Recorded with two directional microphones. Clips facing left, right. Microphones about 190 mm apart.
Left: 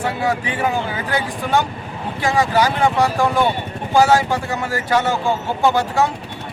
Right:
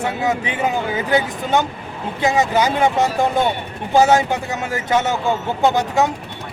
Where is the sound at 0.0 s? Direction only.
20° right (ahead or behind).